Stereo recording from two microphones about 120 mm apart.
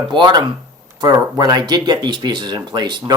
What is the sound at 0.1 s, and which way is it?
Speech, 40° right (ahead or behind).